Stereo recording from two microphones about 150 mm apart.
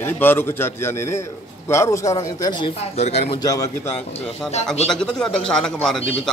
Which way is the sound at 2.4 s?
30° left (ahead or behind).